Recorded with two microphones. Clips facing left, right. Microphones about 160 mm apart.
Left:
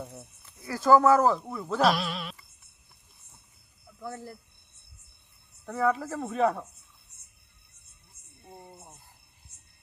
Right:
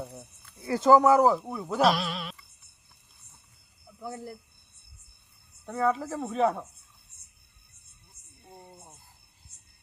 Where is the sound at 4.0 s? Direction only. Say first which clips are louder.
Right 1 dB; 10° right (ahead or behind).